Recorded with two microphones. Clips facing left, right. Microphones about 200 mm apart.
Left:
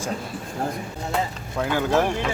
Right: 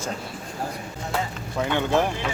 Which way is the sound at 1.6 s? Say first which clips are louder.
Left 1 dB; 5° left (ahead or behind).